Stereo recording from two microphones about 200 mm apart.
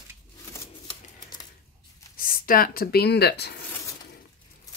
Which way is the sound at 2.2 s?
45° left (ahead or behind).